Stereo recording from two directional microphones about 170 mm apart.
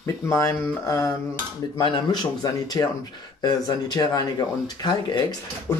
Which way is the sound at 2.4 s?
20° left (ahead or behind).